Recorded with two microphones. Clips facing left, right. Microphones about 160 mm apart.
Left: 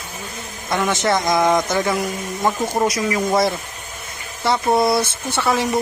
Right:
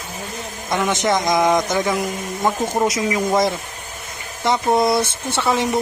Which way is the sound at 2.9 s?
15° right (ahead or behind).